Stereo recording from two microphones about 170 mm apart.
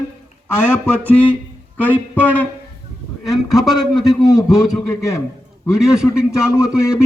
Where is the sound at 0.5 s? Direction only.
10° left (ahead or behind).